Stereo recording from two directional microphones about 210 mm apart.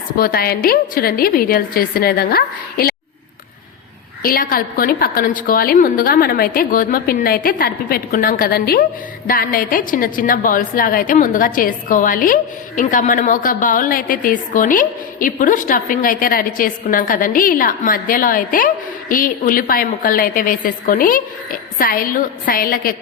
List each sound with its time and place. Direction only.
0.2 s a woman's voice: 45° left (ahead or behind)
4.2 s a woman's voice: 45° left (ahead or behind)